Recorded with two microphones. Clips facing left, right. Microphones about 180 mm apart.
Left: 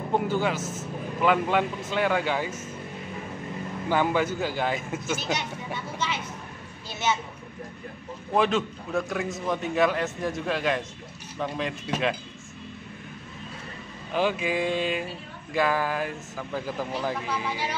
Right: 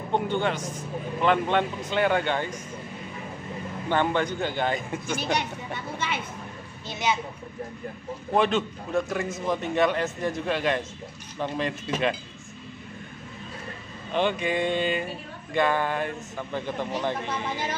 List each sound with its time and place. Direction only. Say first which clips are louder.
0.1 s a man's voice: even; 5° left (ahead or behind)
3.9 s a man's voice: even; 5° left (ahead or behind)
5.9 s speech: even; 55° right (ahead or behind)
6.9 s a child's voice: even; 15° right (ahead or behind)
8.4 s a man's voice: even; centre (ahead or behind)
14.1 s a man's voice: even; 5° left (ahead or behind)